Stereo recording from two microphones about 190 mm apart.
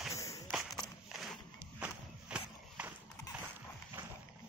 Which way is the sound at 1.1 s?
Centre (ahead or behind).